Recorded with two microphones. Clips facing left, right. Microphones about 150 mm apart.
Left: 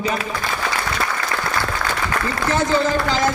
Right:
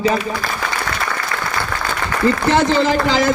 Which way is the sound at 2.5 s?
85° right.